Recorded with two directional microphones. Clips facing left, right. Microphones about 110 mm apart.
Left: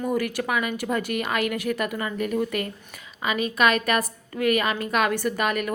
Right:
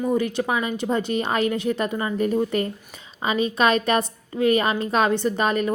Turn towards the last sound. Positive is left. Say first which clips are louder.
# right 3 dB
turn(degrees=-30)  # may be behind; listen again after turning